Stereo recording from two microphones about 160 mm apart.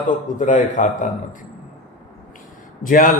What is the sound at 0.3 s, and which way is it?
Speech, 50° left (ahead or behind).